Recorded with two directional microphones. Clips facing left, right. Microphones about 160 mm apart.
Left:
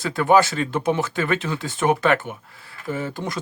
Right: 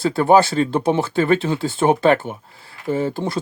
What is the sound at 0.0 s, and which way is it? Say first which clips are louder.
Speech: right 3 dB; 30° right (ahead or behind).